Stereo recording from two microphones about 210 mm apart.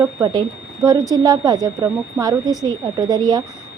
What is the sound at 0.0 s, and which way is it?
Speech, 15° right (ahead or behind).